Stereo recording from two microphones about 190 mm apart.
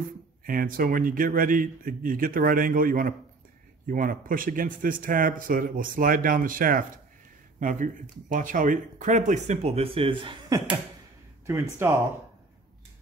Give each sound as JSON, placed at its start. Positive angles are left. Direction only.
{"t": 0.5, "sound": "speech", "side_deg": -50}
{"t": 11.8, "sound": "speech", "side_deg": -10}